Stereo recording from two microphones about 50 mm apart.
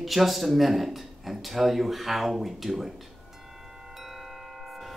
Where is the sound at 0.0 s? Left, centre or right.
Centre.